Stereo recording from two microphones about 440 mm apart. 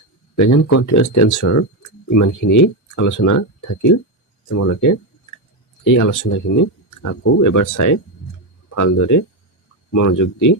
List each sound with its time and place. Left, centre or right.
0.3 s speech: left